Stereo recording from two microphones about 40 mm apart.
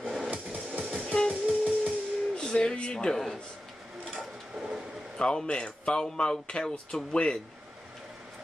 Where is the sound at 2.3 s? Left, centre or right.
Left.